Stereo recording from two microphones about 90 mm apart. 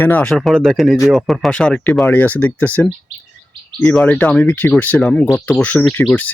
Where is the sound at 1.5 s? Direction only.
10° left (ahead or behind).